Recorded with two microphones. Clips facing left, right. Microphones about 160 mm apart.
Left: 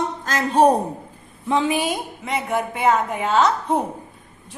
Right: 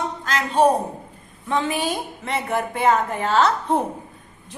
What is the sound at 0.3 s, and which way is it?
Speech, 40° left (ahead or behind).